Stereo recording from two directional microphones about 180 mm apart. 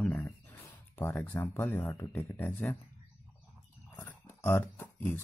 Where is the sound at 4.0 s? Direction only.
10° left (ahead or behind).